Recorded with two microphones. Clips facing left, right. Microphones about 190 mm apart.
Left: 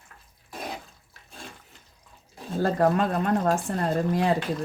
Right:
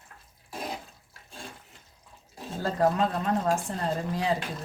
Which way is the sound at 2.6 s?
60° left (ahead or behind).